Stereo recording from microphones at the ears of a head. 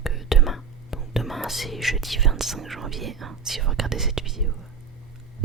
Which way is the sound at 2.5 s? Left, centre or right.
Right.